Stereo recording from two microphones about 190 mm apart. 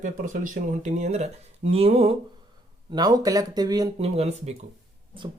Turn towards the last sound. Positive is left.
turn(degrees=-35)  # may be behind; listen again after turning